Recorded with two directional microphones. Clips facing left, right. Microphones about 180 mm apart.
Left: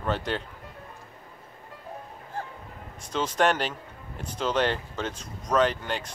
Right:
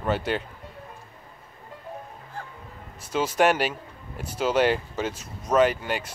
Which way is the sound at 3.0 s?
5° right (ahead or behind).